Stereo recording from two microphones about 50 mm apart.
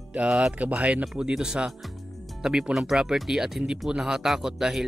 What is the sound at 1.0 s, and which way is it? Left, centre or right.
Speech, centre.